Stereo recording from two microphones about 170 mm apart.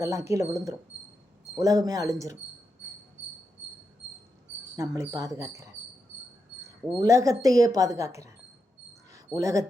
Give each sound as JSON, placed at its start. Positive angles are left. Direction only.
{"t": 0.0, "sound": "a woman's voice", "side_deg": -20}
{"t": 4.8, "sound": "a woman's voice", "side_deg": -20}
{"t": 7.0, "sound": "a woman's voice", "side_deg": -20}